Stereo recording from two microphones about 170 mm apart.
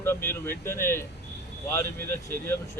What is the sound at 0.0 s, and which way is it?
Speech, 15° left (ahead or behind).